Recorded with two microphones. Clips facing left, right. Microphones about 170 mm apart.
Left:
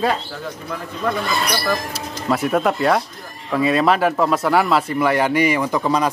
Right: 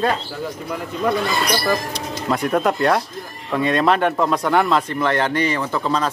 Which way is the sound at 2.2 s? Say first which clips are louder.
Left 1 dB; 5° left (ahead or behind).